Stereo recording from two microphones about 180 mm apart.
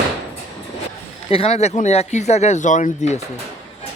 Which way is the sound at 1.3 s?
35° left (ahead or behind).